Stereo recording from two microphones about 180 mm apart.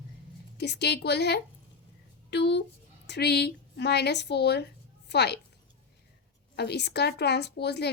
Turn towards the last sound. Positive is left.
turn(degrees=70)  # may be behind; listen again after turning